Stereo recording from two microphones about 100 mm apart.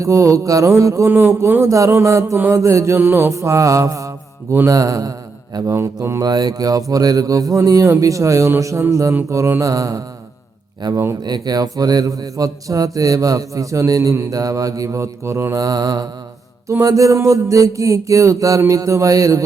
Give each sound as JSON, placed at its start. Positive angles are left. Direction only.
{"t": 0.0, "sound": "speech", "side_deg": -30}
{"t": 2.4, "sound": "mantra", "side_deg": -30}
{"t": 4.7, "sound": "speech", "side_deg": -35}
{"t": 6.2, "sound": "speech", "side_deg": -45}
{"t": 11.2, "sound": "speech", "side_deg": -40}